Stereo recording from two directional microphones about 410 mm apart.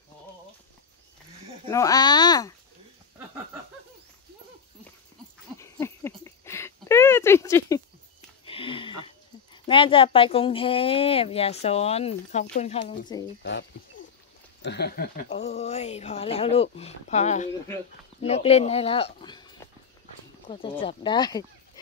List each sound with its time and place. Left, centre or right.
1.7 s speech: centre
5.6 s a sound: centre
9.0 s speech: centre